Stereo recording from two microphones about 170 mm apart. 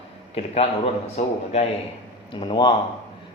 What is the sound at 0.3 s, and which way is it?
Speech, 35° left (ahead or behind).